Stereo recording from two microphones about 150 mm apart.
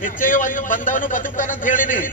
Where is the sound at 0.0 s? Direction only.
60° left (ahead or behind).